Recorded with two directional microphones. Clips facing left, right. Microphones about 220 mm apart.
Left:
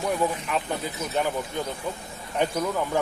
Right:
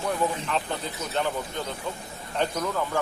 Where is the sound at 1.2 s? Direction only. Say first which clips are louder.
Left 1 dB; 10° left (ahead or behind).